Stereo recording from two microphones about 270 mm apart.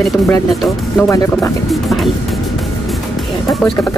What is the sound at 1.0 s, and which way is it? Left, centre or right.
Speech, centre.